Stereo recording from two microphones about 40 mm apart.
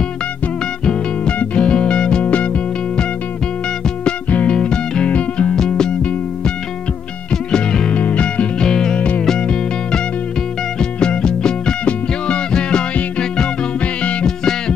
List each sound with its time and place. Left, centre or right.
1.4 s music: left
4.5 s music: left
5.5 s music: centre
7.5 s music: left
7.9 s music: left
8.5 s music: centre
10.8 s music: left